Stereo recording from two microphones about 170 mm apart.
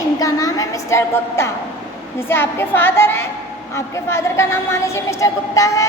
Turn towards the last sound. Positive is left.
turn(degrees=20)  # may be behind; listen again after turning